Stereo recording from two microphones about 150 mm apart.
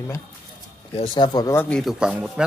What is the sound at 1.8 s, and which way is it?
Speech, 5° right (ahead or behind).